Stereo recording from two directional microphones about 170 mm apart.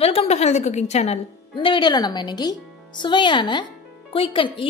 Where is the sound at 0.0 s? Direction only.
35° left (ahead or behind).